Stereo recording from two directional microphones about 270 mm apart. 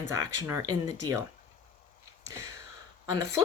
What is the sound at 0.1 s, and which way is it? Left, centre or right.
Speech, centre.